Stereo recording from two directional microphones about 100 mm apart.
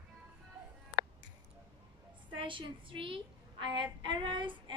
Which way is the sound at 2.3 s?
55° right (ahead or behind).